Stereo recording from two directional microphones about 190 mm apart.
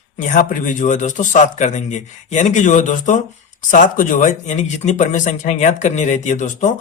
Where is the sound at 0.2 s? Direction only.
45° left (ahead or behind).